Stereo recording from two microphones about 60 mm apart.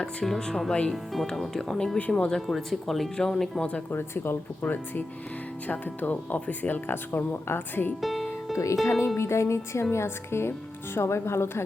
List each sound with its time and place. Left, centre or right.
0.0 s speech: centre
2.0 s speech: centre
2.5 s speech: centre
3.6 s speech: centre
3.9 s speech: left
8.0 s music: centre
8.5 s speech: left